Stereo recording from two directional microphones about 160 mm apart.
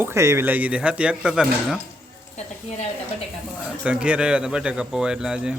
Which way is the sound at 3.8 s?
5° right (ahead or behind).